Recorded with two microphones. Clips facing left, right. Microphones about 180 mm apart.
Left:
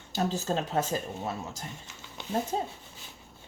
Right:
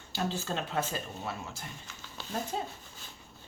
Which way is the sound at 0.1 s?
40° left (ahead or behind).